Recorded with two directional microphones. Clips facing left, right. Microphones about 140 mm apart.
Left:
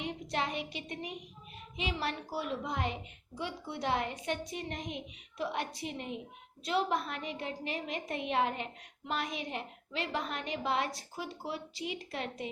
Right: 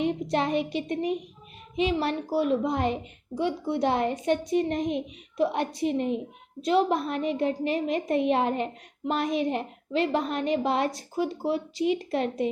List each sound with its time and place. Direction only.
0.0 s a woman's voice: 45° right (ahead or behind)